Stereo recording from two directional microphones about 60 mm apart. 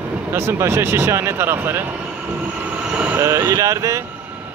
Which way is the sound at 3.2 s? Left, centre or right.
Right.